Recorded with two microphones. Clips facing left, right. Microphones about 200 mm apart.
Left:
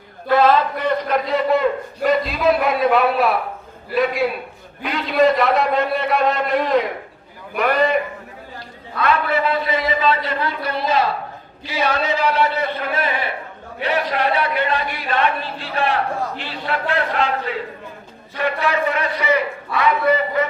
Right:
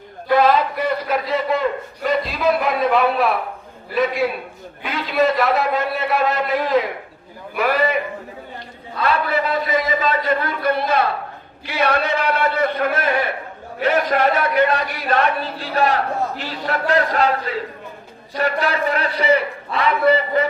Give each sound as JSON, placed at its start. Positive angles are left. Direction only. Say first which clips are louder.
{"t": 0.3, "sound": "a man's voice", "louder": "even", "side_deg": -10}
{"t": 9.0, "sound": "a man's voice", "louder": "left 1 dB", "side_deg": -40}